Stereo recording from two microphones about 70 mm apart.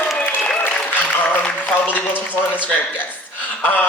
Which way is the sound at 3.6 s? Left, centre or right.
Left.